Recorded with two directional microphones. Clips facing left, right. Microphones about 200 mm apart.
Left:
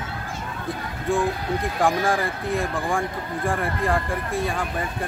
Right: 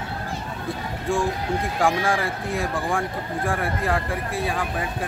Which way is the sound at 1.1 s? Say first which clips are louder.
Left 1 dB; centre (ahead or behind).